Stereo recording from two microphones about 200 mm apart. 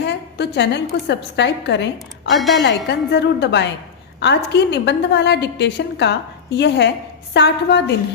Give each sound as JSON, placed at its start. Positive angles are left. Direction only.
{"t": 0.0, "sound": "a woman's voice", "side_deg": 60}